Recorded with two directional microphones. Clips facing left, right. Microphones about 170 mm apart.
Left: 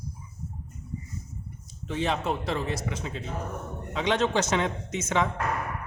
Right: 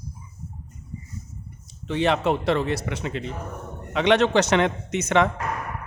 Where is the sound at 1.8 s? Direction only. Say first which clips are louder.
Right 6 dB; 70° right (ahead or behind).